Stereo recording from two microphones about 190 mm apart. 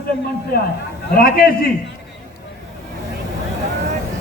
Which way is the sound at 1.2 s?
50° left (ahead or behind).